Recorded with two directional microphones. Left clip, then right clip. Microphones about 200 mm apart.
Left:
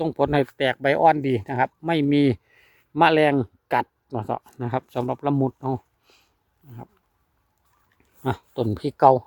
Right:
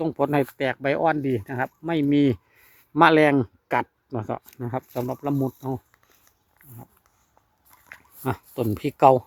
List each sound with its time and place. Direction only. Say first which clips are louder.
0.0 s speech: left 1 dB; 20° left (ahead or behind)
2.9 s speech: right 1 dB; centre (ahead or behind)
4.5 s speech: left 3 dB; 20° left (ahead or behind)
8.2 s a sound: left 2 dB; 20° left (ahead or behind)
8.7 s speech: even; 10° left (ahead or behind)